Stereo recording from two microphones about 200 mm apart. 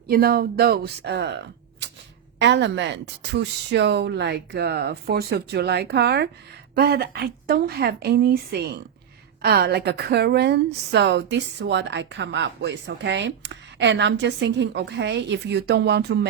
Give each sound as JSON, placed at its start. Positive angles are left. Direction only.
{"t": 0.1, "sound": "speech", "side_deg": -50}
{"t": 2.4, "sound": "a woman's voice", "side_deg": -60}